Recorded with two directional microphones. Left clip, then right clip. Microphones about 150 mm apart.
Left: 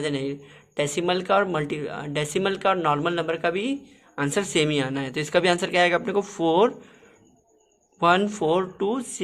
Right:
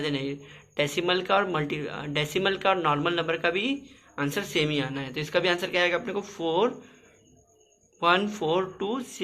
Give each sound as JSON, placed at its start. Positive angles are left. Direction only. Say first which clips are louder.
{"t": 0.0, "sound": "speech", "louder": "left 2 dB", "side_deg": 35}
{"t": 7.9, "sound": "speech", "louder": "left 3 dB", "side_deg": 45}